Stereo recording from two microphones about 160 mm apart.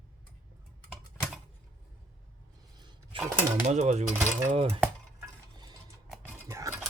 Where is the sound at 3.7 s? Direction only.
45° right (ahead or behind).